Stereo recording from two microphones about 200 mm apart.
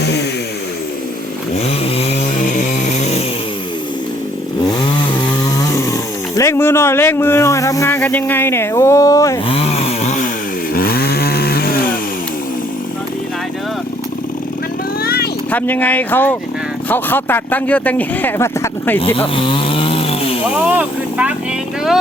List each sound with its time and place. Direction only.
0.0 s a sound: 55° left (ahead or behind)
1.8 s chainsaw: 30° left (ahead or behind)
6.3 s speech: 15° left (ahead or behind)
9.5 s a sound: 30° left (ahead or behind)
10.8 s chainsaw: 50° left (ahead or behind)
15.0 s vehicle: 50° left (ahead or behind)
15.5 s speech: 10° left (ahead or behind)
19.4 s chainsaw: 25° left (ahead or behind)
20.7 s speech: 5° right (ahead or behind)